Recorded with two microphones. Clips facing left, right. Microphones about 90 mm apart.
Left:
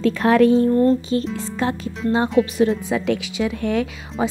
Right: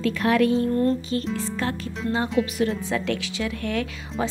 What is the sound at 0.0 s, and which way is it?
Speech, 35° left (ahead or behind).